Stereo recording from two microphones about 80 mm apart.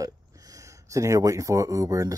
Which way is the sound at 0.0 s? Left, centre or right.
Right.